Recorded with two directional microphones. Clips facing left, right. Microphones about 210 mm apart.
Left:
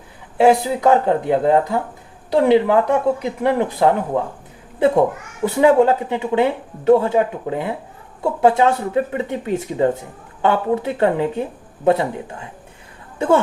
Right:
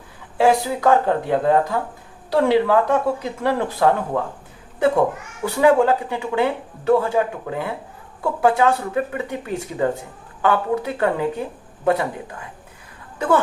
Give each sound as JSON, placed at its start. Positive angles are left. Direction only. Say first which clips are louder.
{"t": 0.3, "sound": "speech", "louder": "left 3 dB", "side_deg": 20}